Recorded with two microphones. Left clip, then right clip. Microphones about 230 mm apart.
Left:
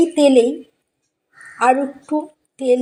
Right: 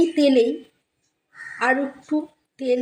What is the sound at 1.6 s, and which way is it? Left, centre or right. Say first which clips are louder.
A woman's voice: left 6 dB; centre.